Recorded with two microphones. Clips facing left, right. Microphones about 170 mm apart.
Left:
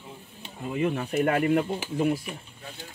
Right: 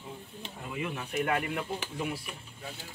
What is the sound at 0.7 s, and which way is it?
Speech, 40° left (ahead or behind).